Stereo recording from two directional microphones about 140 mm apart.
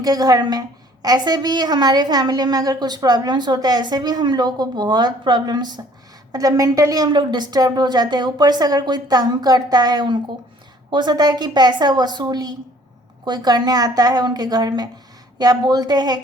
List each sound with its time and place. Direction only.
0.0 s a woman's voice: 25° right (ahead or behind)